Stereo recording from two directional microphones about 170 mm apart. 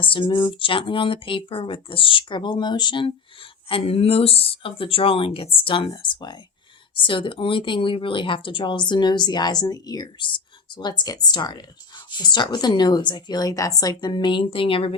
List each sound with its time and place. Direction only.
0.0 s speech: 30° left (ahead or behind)